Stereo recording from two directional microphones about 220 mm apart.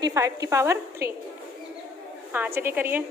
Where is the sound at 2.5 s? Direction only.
10° right (ahead or behind).